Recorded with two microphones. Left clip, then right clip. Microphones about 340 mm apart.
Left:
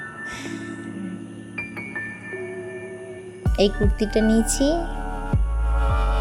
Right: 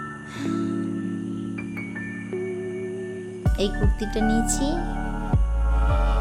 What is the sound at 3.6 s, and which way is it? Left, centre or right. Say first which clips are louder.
Speech: left 7 dB; centre.